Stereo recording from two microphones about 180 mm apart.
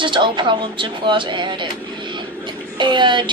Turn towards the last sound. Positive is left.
turn(degrees=-25)  # may be behind; listen again after turning